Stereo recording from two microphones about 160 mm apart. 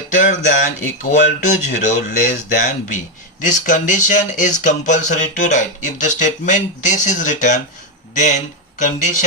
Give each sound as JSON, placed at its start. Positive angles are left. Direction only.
{"t": 0.2, "sound": "speech", "side_deg": 50}